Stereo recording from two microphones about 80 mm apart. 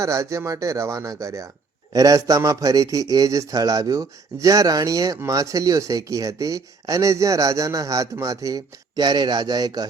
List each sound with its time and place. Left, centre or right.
0.0 s a man's voice: right
9.0 s speech: right